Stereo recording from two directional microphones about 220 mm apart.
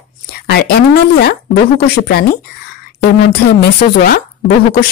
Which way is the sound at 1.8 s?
45° left (ahead or behind).